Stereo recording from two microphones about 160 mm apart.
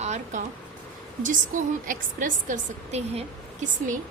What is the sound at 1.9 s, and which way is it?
A woman's voice, 55° right (ahead or behind).